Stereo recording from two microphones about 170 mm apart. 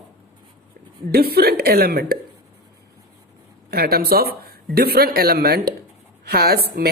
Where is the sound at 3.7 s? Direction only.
65° right (ahead or behind).